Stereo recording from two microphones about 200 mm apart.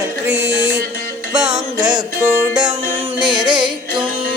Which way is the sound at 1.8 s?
20° right (ahead or behind).